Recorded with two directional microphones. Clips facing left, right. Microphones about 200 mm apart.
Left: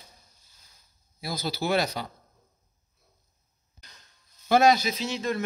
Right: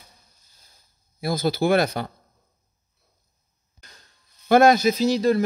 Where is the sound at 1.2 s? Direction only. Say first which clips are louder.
Right 8 dB; 50° right (ahead or behind).